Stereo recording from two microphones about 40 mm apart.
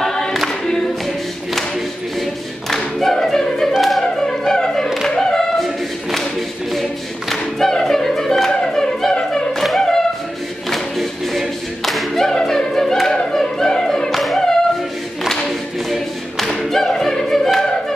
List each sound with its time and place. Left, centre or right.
0.0 s choir: centre
2.7 s singing: centre
3.7 s music: centre
4.0 s music: centre
5.1 s a capella: centre
6.7 s choir: centre
9.6 s music: centre
10.7 s a capella: centre
12.4 s music: centre
14.1 s music: centre
16.7 s music: centre